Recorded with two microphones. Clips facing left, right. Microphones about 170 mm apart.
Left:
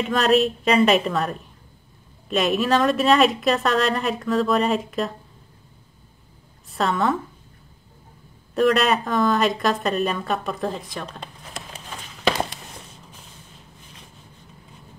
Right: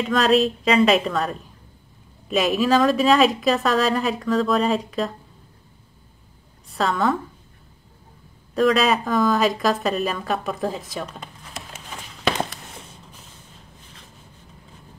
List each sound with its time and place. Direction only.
0.0 s speech: centre (ahead or behind)
6.7 s a woman's voice: centre (ahead or behind)
8.5 s speech: centre (ahead or behind)